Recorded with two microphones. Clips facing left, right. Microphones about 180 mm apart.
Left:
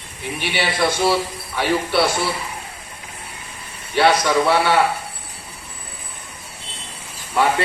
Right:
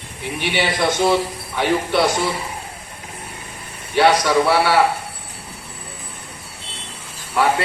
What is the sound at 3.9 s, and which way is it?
Speech, 10° right (ahead or behind).